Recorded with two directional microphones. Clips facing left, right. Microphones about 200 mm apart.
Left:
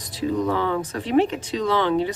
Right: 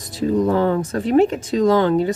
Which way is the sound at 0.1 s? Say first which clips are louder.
Right 5 dB; 45° right (ahead or behind).